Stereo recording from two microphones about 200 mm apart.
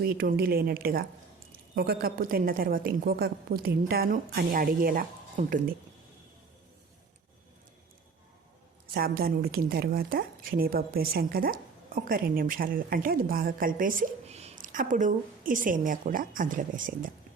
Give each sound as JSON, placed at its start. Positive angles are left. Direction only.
{"t": 0.0, "sound": "speech", "side_deg": -45}
{"t": 8.9, "sound": "speech", "side_deg": -50}